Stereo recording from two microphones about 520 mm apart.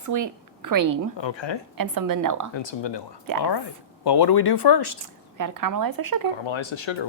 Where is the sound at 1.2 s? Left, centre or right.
Left.